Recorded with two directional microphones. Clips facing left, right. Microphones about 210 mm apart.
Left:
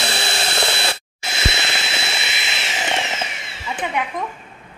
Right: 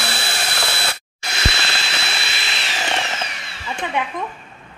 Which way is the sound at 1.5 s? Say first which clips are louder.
Left 1 dB; 20° left (ahead or behind).